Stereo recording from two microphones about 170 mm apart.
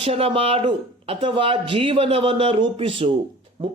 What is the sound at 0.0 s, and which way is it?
A man's voice, 35° right (ahead or behind).